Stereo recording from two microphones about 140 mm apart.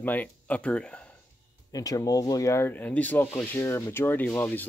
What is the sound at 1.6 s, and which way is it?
Speech, 25° left (ahead or behind).